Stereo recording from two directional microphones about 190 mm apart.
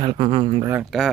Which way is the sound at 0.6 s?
10° right (ahead or behind).